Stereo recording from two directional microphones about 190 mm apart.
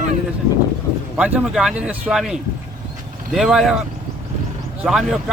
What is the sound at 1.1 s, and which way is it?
Speech, 5° right (ahead or behind).